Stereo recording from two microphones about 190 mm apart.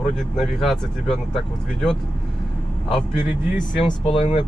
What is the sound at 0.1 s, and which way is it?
Speech, centre (ahead or behind).